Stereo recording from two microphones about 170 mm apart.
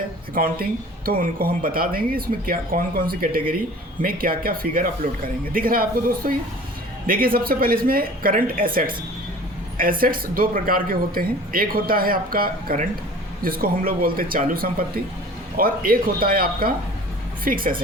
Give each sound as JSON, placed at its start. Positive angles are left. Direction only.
{"t": 0.3, "sound": "speech", "side_deg": -60}
{"t": 10.0, "sound": "speech", "side_deg": -55}